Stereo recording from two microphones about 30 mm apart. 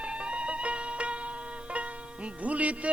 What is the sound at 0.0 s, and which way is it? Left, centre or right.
Music, right.